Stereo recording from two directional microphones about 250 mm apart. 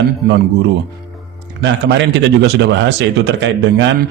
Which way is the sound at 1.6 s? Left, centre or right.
Right.